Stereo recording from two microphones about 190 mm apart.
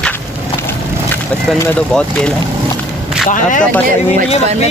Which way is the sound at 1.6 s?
5° left (ahead or behind).